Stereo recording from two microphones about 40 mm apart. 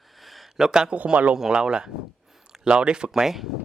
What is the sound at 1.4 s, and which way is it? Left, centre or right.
Speech, centre.